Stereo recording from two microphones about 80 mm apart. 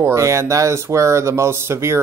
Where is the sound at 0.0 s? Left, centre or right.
Right.